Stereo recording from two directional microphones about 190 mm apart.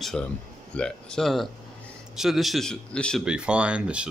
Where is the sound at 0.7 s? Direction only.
5° left (ahead or behind).